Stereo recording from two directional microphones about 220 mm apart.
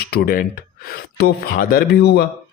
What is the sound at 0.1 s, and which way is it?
Speech, 45° left (ahead or behind).